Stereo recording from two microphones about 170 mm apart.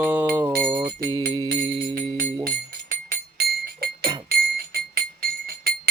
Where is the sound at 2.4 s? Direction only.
60° right (ahead or behind).